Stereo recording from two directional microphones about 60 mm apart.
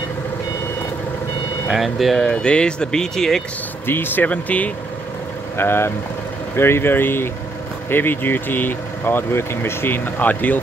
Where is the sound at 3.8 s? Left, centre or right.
Left.